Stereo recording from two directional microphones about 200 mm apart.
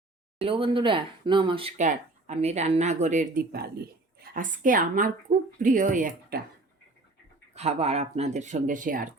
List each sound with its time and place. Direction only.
0.4 s speech: 25° right (ahead or behind)
3.5 s a woman's voice: 50° right (ahead or behind)
7.5 s speech: 35° right (ahead or behind)